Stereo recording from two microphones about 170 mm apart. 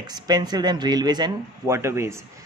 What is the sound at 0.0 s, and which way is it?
Speech, 25° right (ahead or behind).